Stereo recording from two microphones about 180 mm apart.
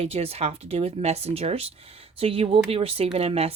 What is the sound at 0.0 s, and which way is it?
Speech, 35° right (ahead or behind).